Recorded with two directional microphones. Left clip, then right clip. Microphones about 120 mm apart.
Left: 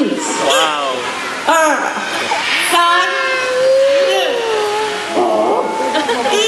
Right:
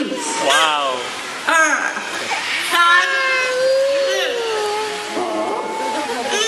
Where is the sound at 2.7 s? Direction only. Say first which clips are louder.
Even; 20° right (ahead or behind).